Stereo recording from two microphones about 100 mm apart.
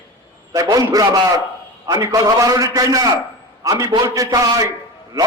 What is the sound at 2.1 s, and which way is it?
A man's voice, 35° right (ahead or behind).